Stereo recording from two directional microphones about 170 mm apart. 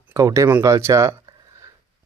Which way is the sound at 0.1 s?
20° right (ahead or behind).